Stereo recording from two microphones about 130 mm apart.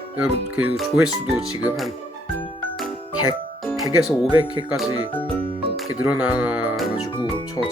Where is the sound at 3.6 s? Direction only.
Centre (ahead or behind).